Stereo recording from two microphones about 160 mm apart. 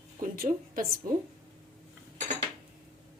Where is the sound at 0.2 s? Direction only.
60° right (ahead or behind).